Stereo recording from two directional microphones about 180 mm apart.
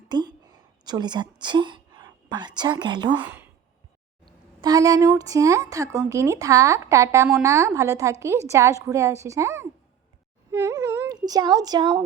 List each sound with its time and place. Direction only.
0.1 s a woman's voice: 25° right (ahead or behind)
3.2 s a woman's voice: 10° right (ahead or behind)
4.6 s a woman's voice: 20° right (ahead or behind)